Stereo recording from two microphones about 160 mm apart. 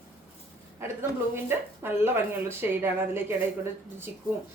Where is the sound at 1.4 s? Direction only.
15° right (ahead or behind).